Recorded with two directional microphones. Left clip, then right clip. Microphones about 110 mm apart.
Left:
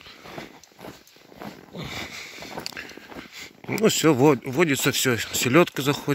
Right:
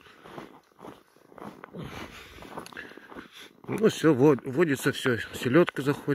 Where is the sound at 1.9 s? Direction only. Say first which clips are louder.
Left 8 dB; 40° left (ahead or behind).